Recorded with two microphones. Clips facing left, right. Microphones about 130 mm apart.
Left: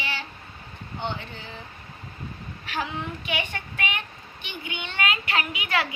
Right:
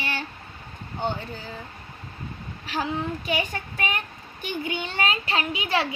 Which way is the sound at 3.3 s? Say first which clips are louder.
Right 3 dB; 40° right (ahead or behind).